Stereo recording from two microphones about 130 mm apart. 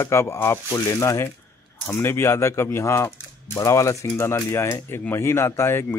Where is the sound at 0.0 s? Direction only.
20° left (ahead or behind).